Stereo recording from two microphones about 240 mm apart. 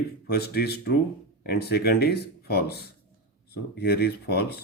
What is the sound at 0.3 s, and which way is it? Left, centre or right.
Speech, left.